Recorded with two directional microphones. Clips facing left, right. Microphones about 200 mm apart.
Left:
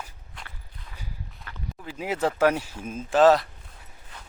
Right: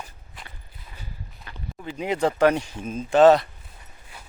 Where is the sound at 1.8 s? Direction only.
5° left (ahead or behind).